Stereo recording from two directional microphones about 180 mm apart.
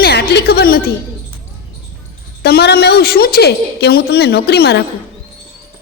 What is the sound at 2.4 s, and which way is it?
A man's voice, 60° left (ahead or behind).